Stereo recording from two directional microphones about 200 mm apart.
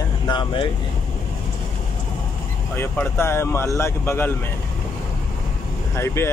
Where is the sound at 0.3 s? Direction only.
20° left (ahead or behind).